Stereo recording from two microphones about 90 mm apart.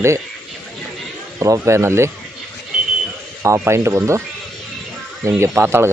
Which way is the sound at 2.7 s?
5° right (ahead or behind).